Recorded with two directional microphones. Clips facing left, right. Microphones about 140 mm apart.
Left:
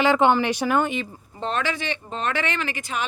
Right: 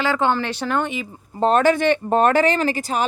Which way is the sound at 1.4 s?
45° right (ahead or behind).